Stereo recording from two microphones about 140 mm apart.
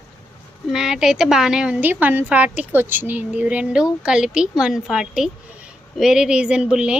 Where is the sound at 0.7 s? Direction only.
5° right (ahead or behind).